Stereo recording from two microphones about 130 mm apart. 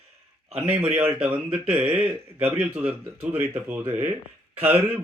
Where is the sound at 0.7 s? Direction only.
15° right (ahead or behind).